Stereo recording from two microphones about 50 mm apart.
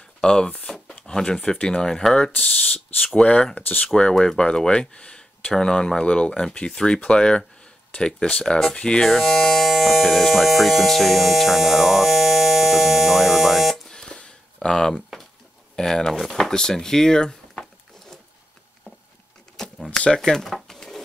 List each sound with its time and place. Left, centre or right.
0.2 s speech: centre
3.8 s speech: centre
9.1 s speech: centre
13.8 s a sound: centre
15.7 s speech: centre
19.5 s a sound: centre